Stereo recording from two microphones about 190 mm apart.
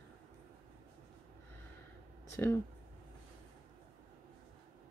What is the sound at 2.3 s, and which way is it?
Speech, 15° left (ahead or behind).